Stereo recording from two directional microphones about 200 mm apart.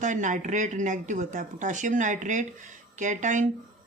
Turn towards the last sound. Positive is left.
turn(degrees=-40)  # may be behind; listen again after turning